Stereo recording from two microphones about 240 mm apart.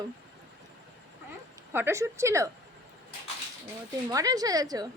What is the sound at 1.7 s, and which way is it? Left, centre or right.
Speech, centre.